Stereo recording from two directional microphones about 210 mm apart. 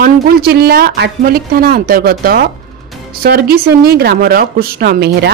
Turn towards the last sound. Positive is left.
turn(degrees=-50)  # may be behind; listen again after turning